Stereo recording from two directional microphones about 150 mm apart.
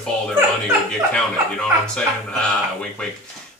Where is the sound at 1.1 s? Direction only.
5° left (ahead or behind).